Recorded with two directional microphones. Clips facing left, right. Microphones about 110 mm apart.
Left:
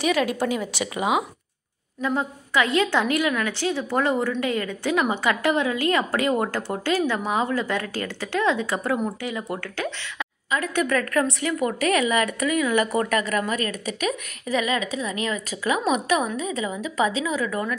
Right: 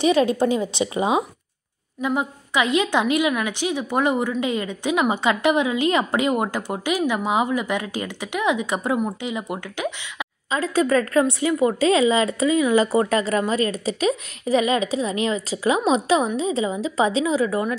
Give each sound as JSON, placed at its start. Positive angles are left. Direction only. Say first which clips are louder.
{"t": 0.0, "sound": "a woman's voice", "louder": "right 5 dB", "side_deg": -25}
{"t": 2.0, "sound": "a woman's voice", "louder": "right 2 dB", "side_deg": -15}
{"t": 10.6, "sound": "a woman's voice", "louder": "right 5 dB", "side_deg": -30}